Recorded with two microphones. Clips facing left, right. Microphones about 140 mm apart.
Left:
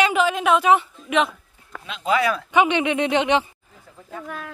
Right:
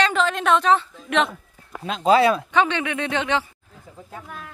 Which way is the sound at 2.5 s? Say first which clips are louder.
Left 3 dB; 15° left (ahead or behind).